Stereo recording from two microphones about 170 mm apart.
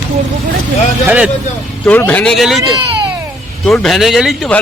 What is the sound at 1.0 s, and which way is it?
Speech, 10° right (ahead or behind).